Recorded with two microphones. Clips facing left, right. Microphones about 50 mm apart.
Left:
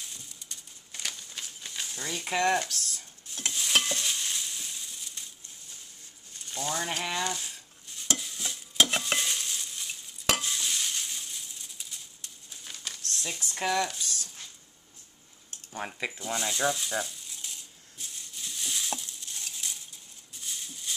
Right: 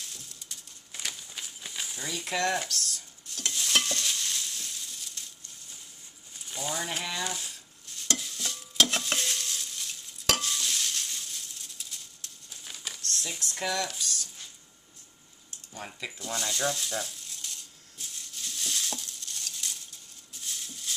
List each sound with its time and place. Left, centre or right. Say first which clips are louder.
0.0 s bird: even; centre
0.9 s a sound: even; centre
2.3 s speech: left 3 dB; centre
2.7 s chopping: right 2 dB; centre
3.5 s frying: left 1 dB; centre
6.3 s a sound: left 1 dB; centre
7.2 s stir: left 2 dB; centre
13.6 s speech: left 3 dB; centre
15.7 s speech: left 5 dB; left
16.2 s a sound: left 1 dB; centre